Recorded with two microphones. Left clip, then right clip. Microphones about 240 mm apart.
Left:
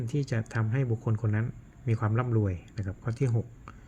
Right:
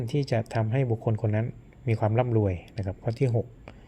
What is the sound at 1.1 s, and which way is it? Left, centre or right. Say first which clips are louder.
Speech: right 5 dB; left.